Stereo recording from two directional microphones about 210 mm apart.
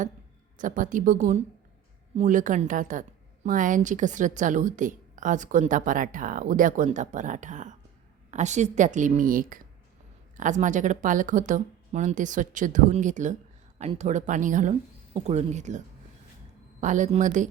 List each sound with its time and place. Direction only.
0.6 s a woman's voice: 40° right (ahead or behind)
16.8 s a woman's voice: 35° right (ahead or behind)